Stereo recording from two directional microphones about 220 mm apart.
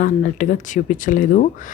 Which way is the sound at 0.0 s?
35° left (ahead or behind).